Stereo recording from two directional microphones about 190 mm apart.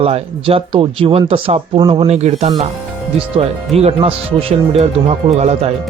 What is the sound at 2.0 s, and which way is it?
Speech, 35° right (ahead or behind).